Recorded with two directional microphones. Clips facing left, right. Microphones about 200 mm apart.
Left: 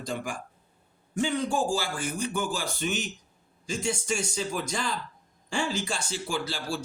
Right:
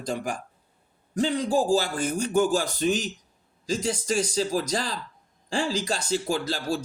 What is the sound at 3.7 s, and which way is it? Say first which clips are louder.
Speech: right 3 dB; 90° right.